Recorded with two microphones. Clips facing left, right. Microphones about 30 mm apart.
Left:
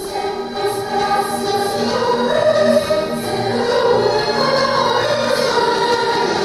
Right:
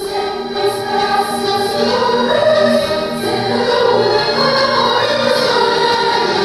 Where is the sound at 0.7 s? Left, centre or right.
Right.